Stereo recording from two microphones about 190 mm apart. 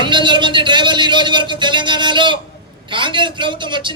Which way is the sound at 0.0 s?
25° right (ahead or behind).